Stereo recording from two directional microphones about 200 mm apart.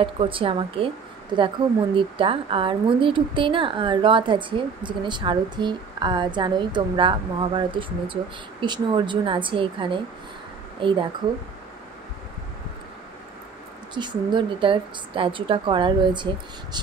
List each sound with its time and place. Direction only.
0.0 s a woman's voice: 25° right (ahead or behind)
13.9 s a woman's voice: 25° right (ahead or behind)